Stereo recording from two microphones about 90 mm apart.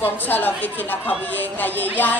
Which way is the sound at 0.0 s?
20° left (ahead or behind).